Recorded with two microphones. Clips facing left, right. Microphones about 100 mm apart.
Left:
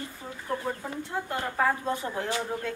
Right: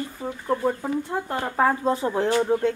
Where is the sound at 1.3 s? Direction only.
40° right (ahead or behind).